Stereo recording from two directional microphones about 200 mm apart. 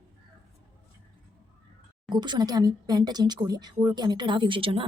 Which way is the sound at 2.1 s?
20° right (ahead or behind).